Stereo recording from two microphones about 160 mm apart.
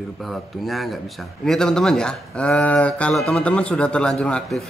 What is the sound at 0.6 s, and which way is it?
Speech, centre (ahead or behind).